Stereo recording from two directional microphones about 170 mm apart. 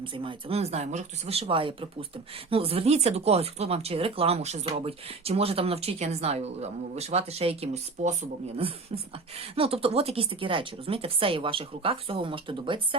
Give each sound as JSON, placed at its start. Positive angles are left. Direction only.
{"t": 0.0, "sound": "speech", "side_deg": -30}